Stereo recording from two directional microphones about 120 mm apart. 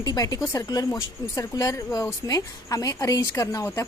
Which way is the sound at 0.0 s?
30° left (ahead or behind).